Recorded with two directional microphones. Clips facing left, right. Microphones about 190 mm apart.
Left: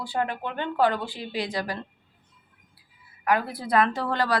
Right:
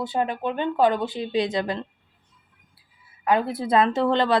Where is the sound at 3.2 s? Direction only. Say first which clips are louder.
Right 3 dB; 25° right (ahead or behind).